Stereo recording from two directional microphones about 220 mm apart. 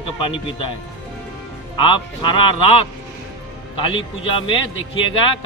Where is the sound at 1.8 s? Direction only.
20° left (ahead or behind).